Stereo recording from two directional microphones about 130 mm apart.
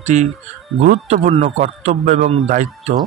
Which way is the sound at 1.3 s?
50° right (ahead or behind).